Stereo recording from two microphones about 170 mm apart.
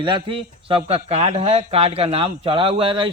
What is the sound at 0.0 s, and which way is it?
A man's voice, 30° right (ahead or behind).